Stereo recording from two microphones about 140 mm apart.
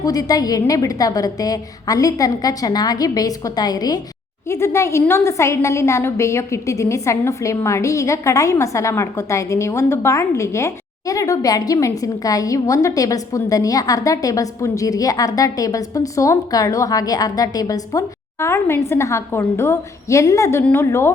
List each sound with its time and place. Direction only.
0.0 s a woman's voice: 25° left (ahead or behind)